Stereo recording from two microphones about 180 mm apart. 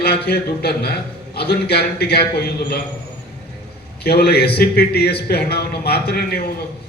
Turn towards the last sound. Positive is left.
turn(degrees=60)  # may be behind; listen again after turning